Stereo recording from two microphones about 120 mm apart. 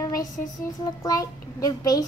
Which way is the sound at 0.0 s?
30° left (ahead or behind).